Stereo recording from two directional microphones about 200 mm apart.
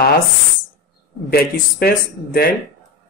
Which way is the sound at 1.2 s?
50° left (ahead or behind).